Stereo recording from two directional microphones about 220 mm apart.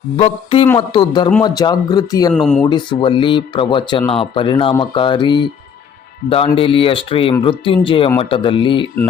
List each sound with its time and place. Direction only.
0.2 s speech: 25° left (ahead or behind)
2.3 s speech: 5° left (ahead or behind)
2.6 s speech: 20° left (ahead or behind)